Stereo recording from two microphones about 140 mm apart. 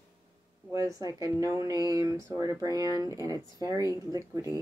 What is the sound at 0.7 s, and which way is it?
Speech, 25° right (ahead or behind).